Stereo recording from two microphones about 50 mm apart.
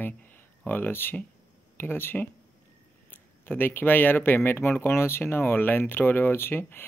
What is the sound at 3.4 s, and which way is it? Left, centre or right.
Speech, left.